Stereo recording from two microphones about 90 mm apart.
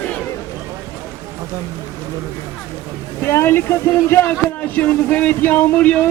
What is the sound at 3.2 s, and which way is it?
Speech, 30° left (ahead or behind).